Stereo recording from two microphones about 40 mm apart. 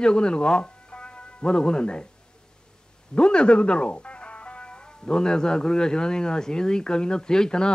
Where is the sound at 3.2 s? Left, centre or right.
Left.